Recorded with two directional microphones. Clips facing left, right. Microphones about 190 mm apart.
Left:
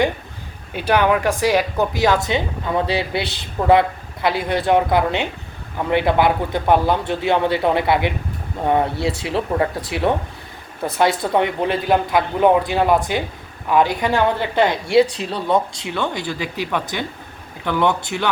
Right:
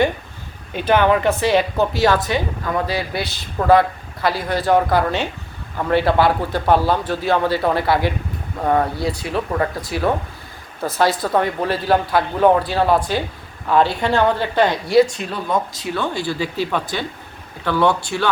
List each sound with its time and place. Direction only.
0.7 s a woman's voice: 10° left (ahead or behind)
15.0 s a man's voice: 30° left (ahead or behind)